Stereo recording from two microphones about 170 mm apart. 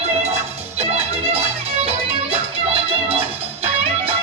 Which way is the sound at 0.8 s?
35° right (ahead or behind).